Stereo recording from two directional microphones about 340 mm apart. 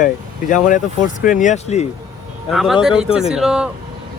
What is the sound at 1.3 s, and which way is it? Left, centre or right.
Speech, left.